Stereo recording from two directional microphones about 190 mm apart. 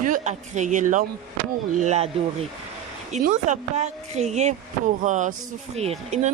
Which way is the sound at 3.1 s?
40° right (ahead or behind).